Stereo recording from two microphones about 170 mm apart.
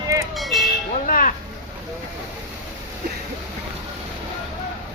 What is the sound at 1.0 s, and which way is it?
Speech, 55° left (ahead or behind).